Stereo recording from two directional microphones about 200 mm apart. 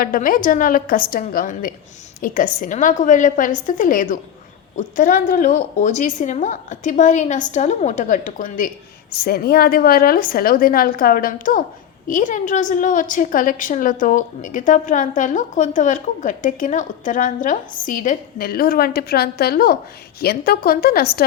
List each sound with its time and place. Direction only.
0.0 s a woman's voice: 45° left (ahead or behind)